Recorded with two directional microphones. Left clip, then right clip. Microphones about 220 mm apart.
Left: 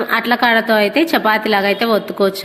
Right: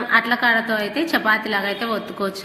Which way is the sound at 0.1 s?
35° left (ahead or behind).